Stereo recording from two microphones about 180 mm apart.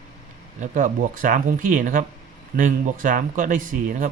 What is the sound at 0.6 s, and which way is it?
Speech, 45° right (ahead or behind).